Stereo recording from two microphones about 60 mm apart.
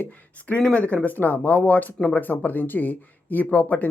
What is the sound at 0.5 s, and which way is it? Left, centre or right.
Speech, left.